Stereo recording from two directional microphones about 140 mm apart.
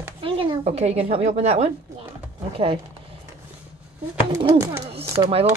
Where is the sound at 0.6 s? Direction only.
50° right (ahead or behind).